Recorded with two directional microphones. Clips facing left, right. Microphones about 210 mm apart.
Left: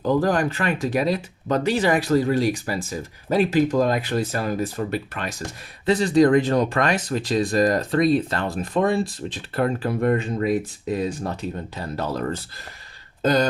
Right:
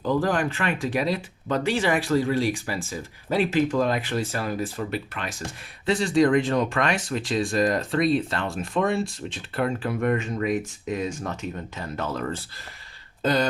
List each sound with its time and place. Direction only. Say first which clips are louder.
0.0 s speech: left 3 dB; 40° left (ahead or behind)